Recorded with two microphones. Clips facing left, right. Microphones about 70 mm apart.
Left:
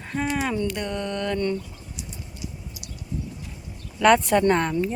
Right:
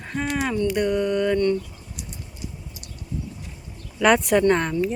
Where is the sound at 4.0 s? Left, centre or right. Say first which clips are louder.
Even; centre.